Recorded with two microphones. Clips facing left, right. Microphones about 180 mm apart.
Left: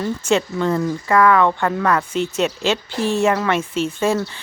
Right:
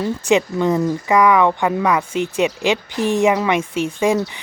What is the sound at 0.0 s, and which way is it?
Speech, 15° right (ahead or behind).